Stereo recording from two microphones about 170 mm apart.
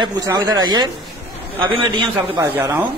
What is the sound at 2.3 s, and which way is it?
Speech, 15° right (ahead or behind).